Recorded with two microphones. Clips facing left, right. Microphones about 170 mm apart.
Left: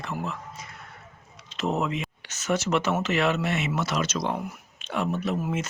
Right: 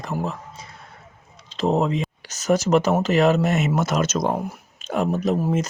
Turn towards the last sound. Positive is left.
turn(degrees=-40)  # may be behind; listen again after turning